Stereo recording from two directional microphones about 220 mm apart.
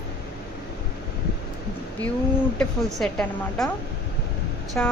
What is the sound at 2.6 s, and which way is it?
A woman's voice, centre (ahead or behind).